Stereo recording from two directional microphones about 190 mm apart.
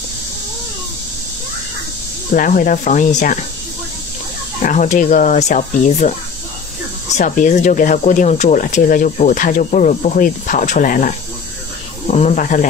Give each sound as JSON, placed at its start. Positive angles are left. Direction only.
{"t": 2.3, "sound": "speech", "side_deg": 45}
{"t": 4.6, "sound": "speech", "side_deg": 40}